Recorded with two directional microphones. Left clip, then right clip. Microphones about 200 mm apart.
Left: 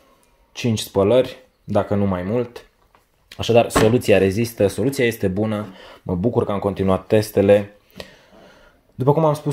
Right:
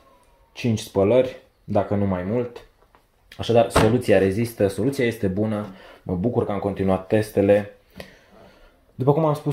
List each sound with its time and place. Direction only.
0.5 s speech: 35° left (ahead or behind)
3.3 s speech: 50° left (ahead or behind)